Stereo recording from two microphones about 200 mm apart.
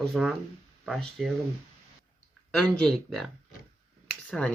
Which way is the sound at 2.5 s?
5° left (ahead or behind).